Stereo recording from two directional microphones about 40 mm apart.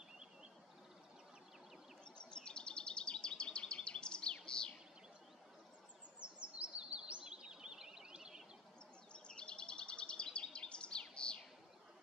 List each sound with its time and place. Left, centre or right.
2.3 s bird vocalization: left
6.1 s bird vocalization: right
9.1 s bird vocalization: left